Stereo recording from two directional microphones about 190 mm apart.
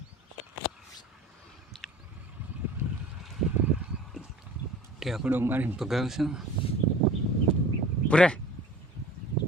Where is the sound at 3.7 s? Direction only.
5° right (ahead or behind).